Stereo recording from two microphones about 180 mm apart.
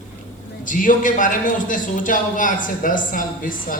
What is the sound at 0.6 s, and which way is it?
A man's voice, 45° left (ahead or behind).